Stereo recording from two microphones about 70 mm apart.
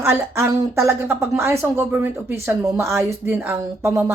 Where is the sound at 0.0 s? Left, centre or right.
Right.